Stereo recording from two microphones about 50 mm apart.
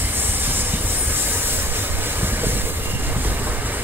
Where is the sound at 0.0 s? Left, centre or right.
Right.